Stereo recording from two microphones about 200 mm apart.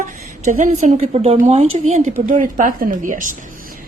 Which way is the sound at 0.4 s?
35° right (ahead or behind).